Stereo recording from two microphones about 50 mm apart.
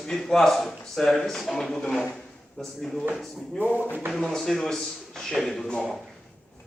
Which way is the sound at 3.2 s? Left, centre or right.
Centre.